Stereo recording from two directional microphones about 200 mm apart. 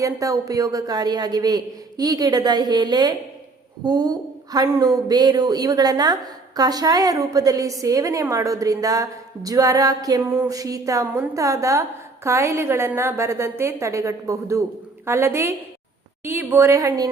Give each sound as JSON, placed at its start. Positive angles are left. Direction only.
{"t": 0.0, "sound": "a woman's voice", "side_deg": -15}